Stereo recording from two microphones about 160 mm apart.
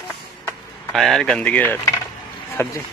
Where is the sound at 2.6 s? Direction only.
15° left (ahead or behind).